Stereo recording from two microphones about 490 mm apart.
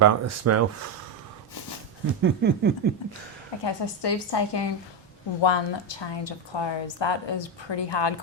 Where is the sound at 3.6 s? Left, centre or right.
Left.